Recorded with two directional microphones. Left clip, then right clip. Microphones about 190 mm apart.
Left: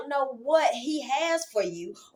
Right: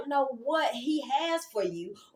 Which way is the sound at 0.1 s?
20° left (ahead or behind).